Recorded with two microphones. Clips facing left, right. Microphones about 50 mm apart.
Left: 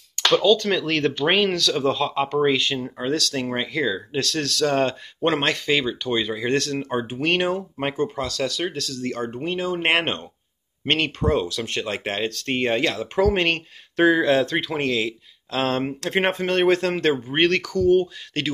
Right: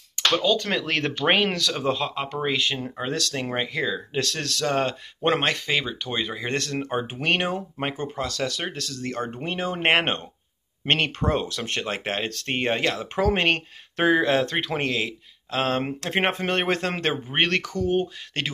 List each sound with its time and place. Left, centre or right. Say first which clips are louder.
0.1 s speech: left 4 dB; centre